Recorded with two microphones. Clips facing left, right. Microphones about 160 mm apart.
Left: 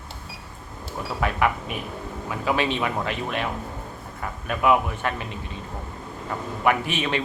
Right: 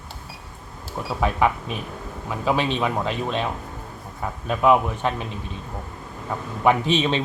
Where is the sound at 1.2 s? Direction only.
20° right (ahead or behind).